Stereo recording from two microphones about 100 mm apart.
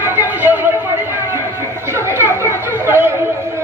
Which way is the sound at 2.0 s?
25° right (ahead or behind).